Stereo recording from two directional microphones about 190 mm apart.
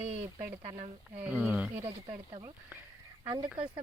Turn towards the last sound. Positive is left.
turn(degrees=-25)  # may be behind; listen again after turning